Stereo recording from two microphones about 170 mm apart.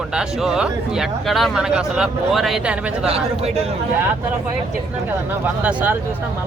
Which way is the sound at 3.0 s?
35° right (ahead or behind).